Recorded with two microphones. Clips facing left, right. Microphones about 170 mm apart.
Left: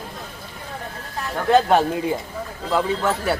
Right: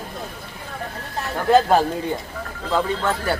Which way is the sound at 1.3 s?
Centre (ahead or behind).